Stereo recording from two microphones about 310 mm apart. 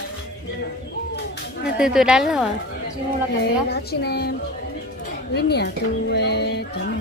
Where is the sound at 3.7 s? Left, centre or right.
Left.